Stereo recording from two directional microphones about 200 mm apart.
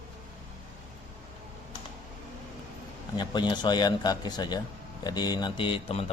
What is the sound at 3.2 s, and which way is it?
Speech, 20° left (ahead or behind).